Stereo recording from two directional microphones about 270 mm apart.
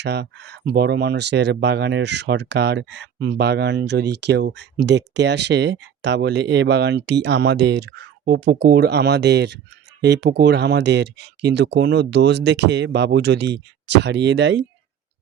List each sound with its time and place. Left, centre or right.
0.0 s speech: right